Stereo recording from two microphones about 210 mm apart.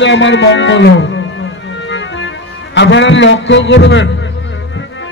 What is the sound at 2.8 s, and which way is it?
A man's voice, 60° left (ahead or behind).